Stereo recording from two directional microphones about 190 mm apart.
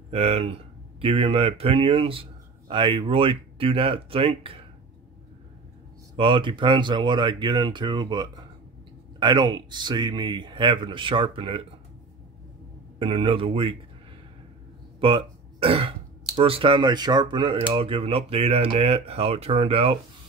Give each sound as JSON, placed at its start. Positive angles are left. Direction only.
{"t": 0.1, "sound": "a man's voice", "side_deg": -30}
{"t": 6.1, "sound": "a man's voice", "side_deg": -25}
{"t": 13.0, "sound": "a man's voice", "side_deg": -30}
{"t": 15.0, "sound": "a man's voice", "side_deg": -25}